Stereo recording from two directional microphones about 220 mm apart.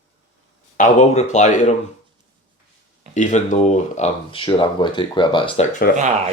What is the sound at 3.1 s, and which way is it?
Speech, 35° left (ahead or behind).